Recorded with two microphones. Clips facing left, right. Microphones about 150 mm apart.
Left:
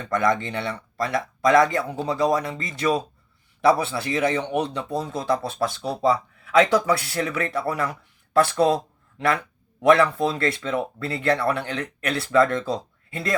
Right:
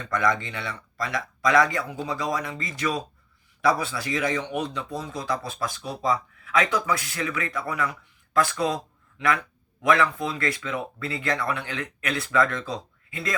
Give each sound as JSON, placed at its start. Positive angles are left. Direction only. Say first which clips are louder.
{"t": 0.5, "sound": "a man's voice", "louder": "left 6 dB", "side_deg": 25}